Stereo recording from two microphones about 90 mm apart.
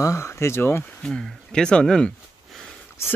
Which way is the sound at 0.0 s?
30° left (ahead or behind).